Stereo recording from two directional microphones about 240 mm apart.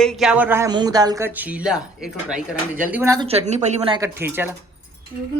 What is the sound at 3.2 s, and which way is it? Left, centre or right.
Speech, right.